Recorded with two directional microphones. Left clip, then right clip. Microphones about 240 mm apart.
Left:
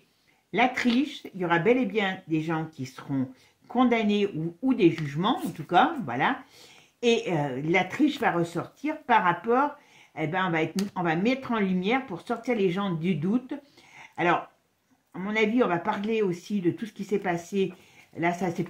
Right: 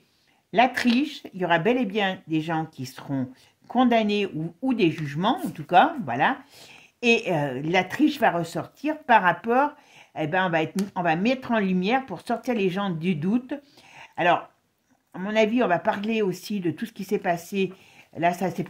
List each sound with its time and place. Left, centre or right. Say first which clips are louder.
0.5 s speech: right 4 dB; right